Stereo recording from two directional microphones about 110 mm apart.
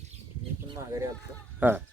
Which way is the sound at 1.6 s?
15° right (ahead or behind).